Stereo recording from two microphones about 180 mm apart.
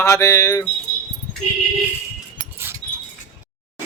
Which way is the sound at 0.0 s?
15° left (ahead or behind).